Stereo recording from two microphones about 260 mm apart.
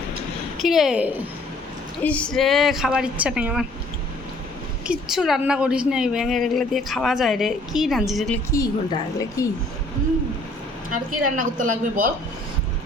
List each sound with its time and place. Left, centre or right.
0.6 s a woman's voice: centre
4.9 s a woman's voice: centre
9.1 s a woman's voice: centre
10.8 s a woman's voice: right